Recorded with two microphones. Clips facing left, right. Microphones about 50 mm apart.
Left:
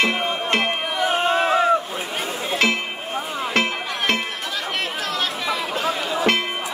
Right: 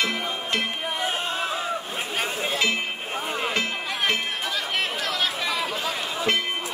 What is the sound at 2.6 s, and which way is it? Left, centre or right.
Music, left.